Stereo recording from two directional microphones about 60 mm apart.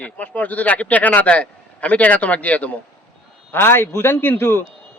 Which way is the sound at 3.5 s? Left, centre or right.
Left.